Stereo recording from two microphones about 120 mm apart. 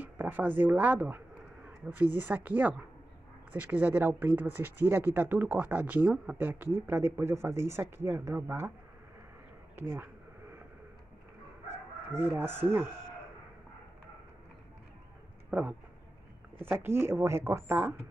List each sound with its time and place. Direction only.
0.0 s speech: 15° right (ahead or behind)
9.8 s speech: 20° right (ahead or behind)
12.2 s speech: 15° right (ahead or behind)
15.5 s speech: 15° right (ahead or behind)